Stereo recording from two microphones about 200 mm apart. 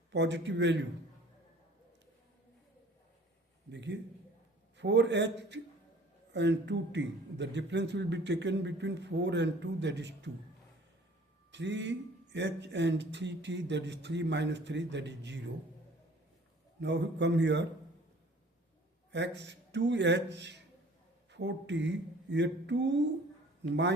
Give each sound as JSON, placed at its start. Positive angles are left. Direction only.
{"t": 0.1, "sound": "a man's voice", "side_deg": -60}
{"t": 3.7, "sound": "a man's voice", "side_deg": -60}
{"t": 11.5, "sound": "a man's voice", "side_deg": -60}
{"t": 16.8, "sound": "a man's voice", "side_deg": -60}
{"t": 19.1, "sound": "a man's voice", "side_deg": -60}